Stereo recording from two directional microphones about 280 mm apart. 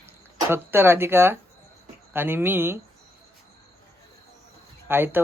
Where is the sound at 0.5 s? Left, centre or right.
Centre.